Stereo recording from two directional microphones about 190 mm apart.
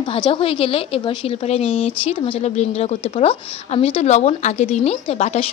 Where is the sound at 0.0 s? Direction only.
25° left (ahead or behind).